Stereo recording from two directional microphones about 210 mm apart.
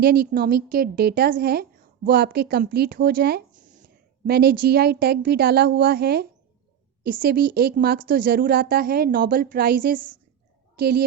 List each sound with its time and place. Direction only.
0.0 s a woman's voice: 45° right (ahead or behind)